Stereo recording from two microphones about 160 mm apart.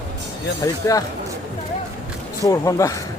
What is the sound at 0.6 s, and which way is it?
Speech, 20° left (ahead or behind).